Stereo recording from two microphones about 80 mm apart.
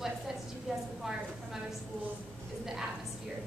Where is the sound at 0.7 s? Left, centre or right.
Centre.